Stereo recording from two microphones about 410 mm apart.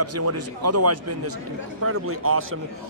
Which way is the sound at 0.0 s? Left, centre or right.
Right.